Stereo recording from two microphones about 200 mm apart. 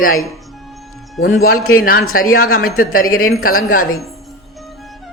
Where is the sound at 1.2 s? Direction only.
80° left.